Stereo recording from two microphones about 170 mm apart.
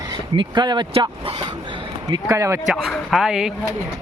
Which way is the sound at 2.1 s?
20° right (ahead or behind).